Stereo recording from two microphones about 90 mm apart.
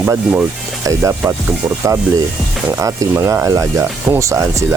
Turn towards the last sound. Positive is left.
turn(degrees=-35)  # may be behind; listen again after turning